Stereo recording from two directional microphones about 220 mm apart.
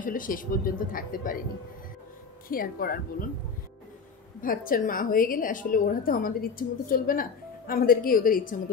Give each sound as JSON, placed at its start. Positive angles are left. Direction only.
{"t": 0.0, "sound": "a woman's voice", "side_deg": 40}
{"t": 2.4, "sound": "a woman's voice", "side_deg": 40}
{"t": 4.4, "sound": "a woman's voice", "side_deg": 40}